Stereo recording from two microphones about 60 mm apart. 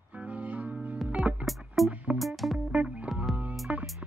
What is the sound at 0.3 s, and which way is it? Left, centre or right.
Music, right.